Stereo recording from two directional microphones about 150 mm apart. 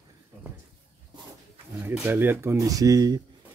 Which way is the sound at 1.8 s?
15° right (ahead or behind).